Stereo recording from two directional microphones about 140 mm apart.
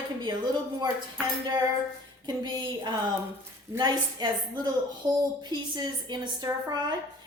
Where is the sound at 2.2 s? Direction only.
30° right (ahead or behind).